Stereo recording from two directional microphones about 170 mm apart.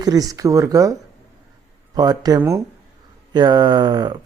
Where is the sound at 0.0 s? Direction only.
20° right (ahead or behind).